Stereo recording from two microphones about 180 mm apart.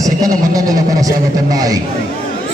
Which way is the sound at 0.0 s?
20° right (ahead or behind).